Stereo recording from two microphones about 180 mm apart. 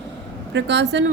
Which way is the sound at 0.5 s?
75° right (ahead or behind).